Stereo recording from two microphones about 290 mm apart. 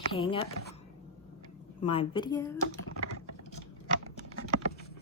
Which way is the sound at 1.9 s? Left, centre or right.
Centre.